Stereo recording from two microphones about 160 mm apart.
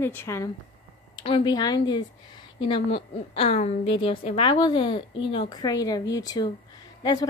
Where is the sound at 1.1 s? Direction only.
30° left (ahead or behind).